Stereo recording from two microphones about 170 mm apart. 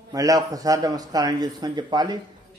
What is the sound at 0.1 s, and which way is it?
Speech, 20° right (ahead or behind).